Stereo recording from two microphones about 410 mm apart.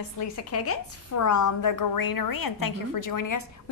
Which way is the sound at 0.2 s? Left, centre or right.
Left.